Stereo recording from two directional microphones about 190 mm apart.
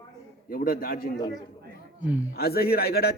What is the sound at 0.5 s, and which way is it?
Speech, 50° left (ahead or behind).